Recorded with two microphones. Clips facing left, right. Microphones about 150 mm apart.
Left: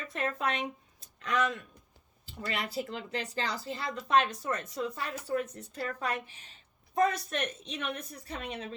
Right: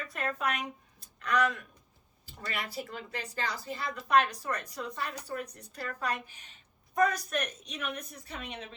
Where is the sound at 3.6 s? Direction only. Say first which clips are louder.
Even; 25° left (ahead or behind).